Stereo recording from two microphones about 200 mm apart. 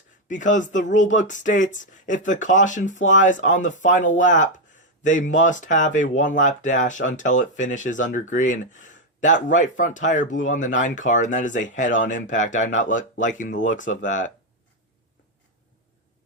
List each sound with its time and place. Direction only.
0.3 s speech: 40° left (ahead or behind)